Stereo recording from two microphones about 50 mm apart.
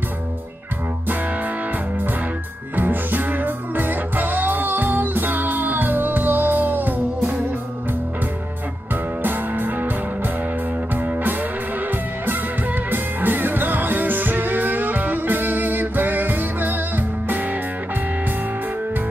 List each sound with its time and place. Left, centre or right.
2.7 s music: right
9.2 s music: right
11.0 s music: right
12.9 s music: right